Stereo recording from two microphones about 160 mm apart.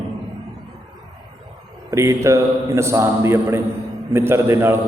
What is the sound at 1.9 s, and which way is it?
A man's voice, 20° right (ahead or behind).